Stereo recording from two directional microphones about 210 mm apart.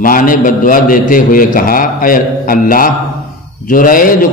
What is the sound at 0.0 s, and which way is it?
A man's voice, 40° left (ahead or behind).